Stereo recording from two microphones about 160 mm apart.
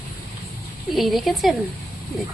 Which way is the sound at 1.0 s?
Centre (ahead or behind).